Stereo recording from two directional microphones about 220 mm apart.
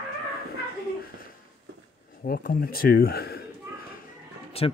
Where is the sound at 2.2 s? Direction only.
40° left (ahead or behind).